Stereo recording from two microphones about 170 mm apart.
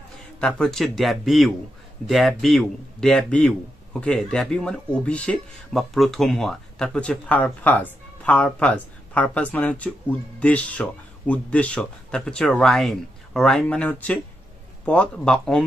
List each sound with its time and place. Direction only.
0.4 s speech: centre (ahead or behind)